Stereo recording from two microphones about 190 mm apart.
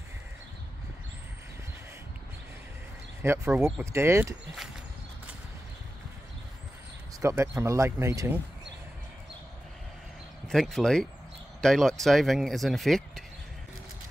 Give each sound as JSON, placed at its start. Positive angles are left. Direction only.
{"t": 3.2, "sound": "speech", "side_deg": -15}
{"t": 7.2, "sound": "speech", "side_deg": -15}
{"t": 10.5, "sound": "speech", "side_deg": 0}